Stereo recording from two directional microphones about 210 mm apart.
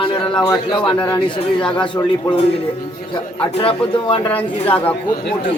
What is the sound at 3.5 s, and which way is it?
Speech, 25° left (ahead or behind).